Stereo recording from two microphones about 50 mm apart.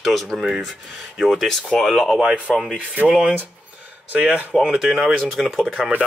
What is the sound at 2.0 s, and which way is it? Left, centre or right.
Speech, centre.